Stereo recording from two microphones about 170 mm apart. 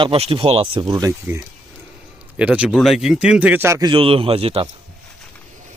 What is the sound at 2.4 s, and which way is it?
A man's voice, 5° right (ahead or behind).